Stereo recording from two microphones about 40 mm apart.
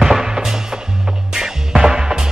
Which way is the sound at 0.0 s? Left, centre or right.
Centre.